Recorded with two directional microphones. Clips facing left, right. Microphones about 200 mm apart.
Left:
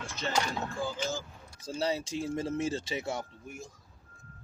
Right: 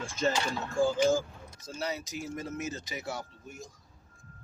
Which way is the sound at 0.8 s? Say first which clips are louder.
Right 12 dB; 45° right (ahead or behind).